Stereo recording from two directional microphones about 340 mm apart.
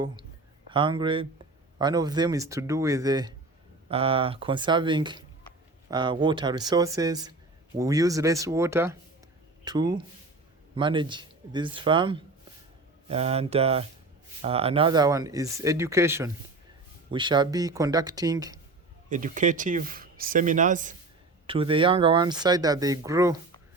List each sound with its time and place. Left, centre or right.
0.7 s speech: centre
19.0 s speech: right